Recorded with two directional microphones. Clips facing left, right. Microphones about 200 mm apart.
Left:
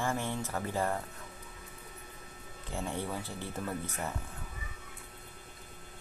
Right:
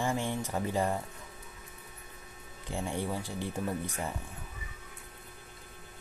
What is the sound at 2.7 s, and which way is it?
Speech, 15° right (ahead or behind).